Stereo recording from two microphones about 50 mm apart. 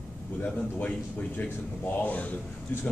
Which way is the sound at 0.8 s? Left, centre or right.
Left.